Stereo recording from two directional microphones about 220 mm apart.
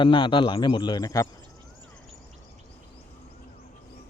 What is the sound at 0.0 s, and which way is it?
Speech, 20° left (ahead or behind).